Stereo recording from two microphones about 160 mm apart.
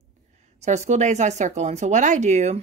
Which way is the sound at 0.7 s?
45° right (ahead or behind).